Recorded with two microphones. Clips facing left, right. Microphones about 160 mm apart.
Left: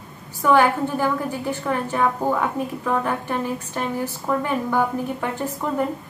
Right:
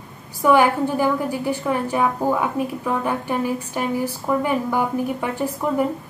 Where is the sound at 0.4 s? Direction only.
10° right (ahead or behind).